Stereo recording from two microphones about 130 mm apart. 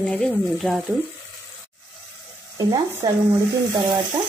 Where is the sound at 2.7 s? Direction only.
30° right (ahead or behind).